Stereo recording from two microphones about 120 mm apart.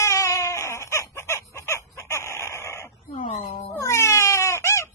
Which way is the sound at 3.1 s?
65° left (ahead or behind).